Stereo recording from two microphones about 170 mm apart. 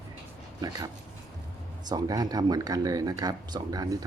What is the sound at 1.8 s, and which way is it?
Speech, 25° right (ahead or behind).